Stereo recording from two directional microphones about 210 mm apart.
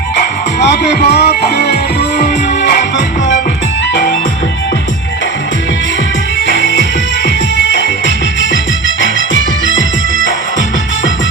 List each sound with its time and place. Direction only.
0.6 s music: 50° left (ahead or behind)
6.5 s music: 55° left (ahead or behind)